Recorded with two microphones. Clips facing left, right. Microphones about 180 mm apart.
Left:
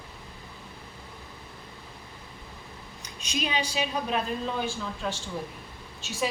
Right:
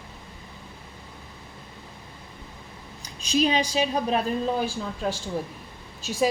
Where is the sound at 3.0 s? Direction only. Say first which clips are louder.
Right 9 dB; 35° right (ahead or behind).